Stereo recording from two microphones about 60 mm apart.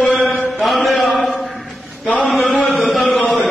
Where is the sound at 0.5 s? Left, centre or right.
Centre.